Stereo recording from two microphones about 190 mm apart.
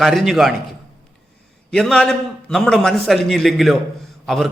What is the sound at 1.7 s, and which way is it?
A man's voice, 5° left (ahead or behind).